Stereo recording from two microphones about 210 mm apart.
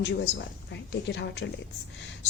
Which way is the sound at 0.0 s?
55° left (ahead or behind).